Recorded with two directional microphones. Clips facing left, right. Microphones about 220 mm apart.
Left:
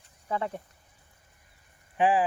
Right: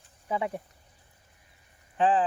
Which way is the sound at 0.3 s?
10° right (ahead or behind).